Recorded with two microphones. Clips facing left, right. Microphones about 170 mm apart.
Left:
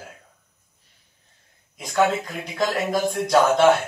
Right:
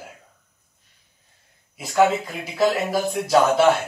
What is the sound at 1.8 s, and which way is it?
Speech, 5° right (ahead or behind).